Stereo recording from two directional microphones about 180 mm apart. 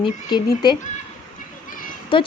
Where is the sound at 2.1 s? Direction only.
30° left (ahead or behind).